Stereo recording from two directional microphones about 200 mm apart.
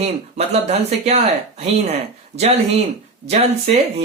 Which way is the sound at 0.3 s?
30° right (ahead or behind).